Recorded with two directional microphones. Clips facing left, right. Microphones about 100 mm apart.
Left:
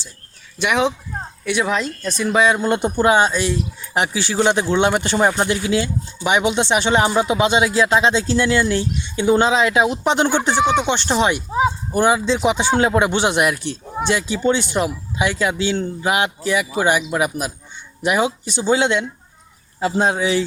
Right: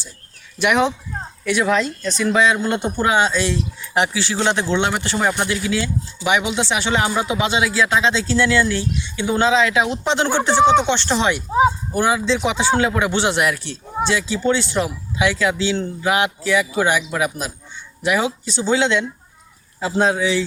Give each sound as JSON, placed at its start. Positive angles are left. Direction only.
{"t": 0.6, "sound": "speech", "side_deg": 0}
{"t": 20.0, "sound": "speech", "side_deg": 15}